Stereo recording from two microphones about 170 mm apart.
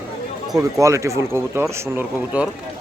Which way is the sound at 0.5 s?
20° right (ahead or behind).